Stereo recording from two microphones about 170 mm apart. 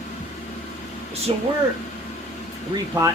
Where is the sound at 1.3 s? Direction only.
35° right (ahead or behind).